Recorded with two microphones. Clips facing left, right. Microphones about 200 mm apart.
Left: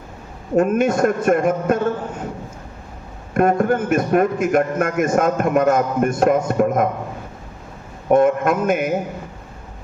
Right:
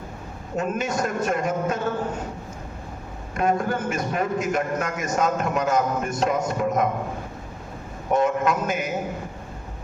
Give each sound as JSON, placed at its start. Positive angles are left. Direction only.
{"t": 0.5, "sound": "a man's voice", "side_deg": 55}
{"t": 3.3, "sound": "a man's voice", "side_deg": 55}
{"t": 8.1, "sound": "a man's voice", "side_deg": 55}